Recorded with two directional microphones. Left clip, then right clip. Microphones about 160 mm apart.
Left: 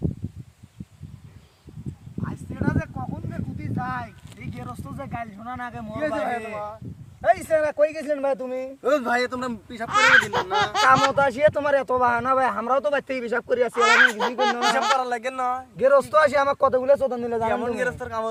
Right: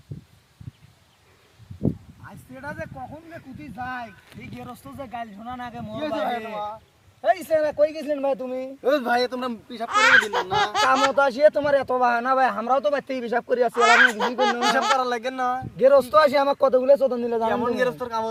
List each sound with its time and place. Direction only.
2.2 s a sound: 40° right (ahead or behind)
3.6 s speech: 15° right (ahead or behind)
6.1 s speech: 20° left (ahead or behind)
7.2 s speech: 10° right (ahead or behind)
8.8 s speech: 10° left (ahead or behind)
9.9 s speech: centre (ahead or behind)
15.0 s speech: 20° left (ahead or behind)
15.8 s speech: 5° right (ahead or behind)
17.7 s speech: 15° left (ahead or behind)